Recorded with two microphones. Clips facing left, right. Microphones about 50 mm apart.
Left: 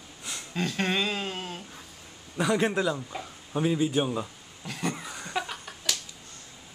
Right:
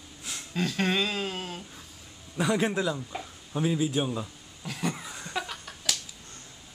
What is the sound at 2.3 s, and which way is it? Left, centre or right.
Speech, centre.